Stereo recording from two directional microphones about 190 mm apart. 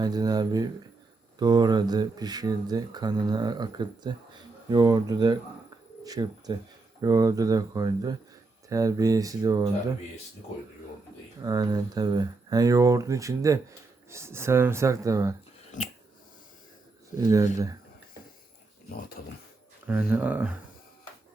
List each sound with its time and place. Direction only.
0.0 s speech: 20° right (ahead or behind)
11.4 s speech: 20° right (ahead or behind)
15.7 s a sound: 40° left (ahead or behind)
17.2 s speech: 20° right (ahead or behind)
19.9 s speech: 10° right (ahead or behind)